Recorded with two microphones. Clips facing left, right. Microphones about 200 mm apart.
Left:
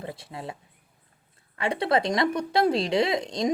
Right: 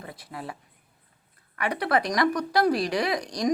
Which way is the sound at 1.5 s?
25° left (ahead or behind).